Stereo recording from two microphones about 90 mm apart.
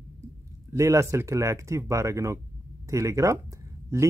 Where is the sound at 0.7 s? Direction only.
35° right (ahead or behind).